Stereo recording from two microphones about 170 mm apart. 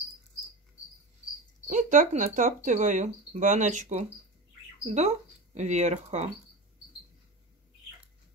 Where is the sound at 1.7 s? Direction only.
50° right (ahead or behind).